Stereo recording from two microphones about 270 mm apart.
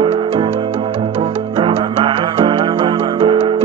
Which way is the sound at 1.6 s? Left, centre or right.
Centre.